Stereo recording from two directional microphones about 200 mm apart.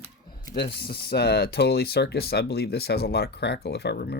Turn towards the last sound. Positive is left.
turn(degrees=55)  # may be behind; listen again after turning